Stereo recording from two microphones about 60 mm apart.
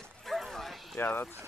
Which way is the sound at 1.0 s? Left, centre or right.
Left.